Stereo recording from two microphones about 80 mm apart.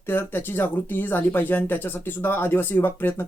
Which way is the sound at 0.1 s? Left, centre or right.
Left.